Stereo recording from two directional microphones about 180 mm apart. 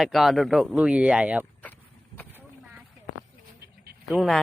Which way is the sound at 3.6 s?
60° right (ahead or behind).